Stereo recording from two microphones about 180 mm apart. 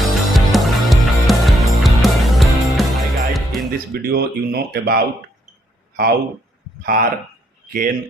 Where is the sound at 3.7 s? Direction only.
55° right (ahead or behind).